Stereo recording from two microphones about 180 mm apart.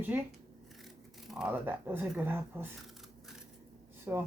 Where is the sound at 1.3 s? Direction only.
5° right (ahead or behind).